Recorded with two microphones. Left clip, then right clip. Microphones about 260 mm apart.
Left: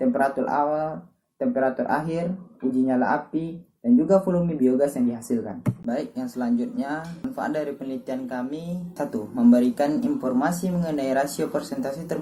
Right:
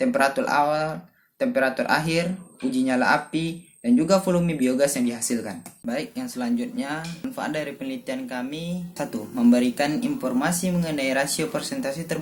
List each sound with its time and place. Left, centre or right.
0.0 s speech: right